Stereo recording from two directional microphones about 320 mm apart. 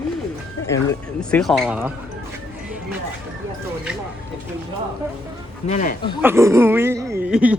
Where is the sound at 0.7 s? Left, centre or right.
Centre.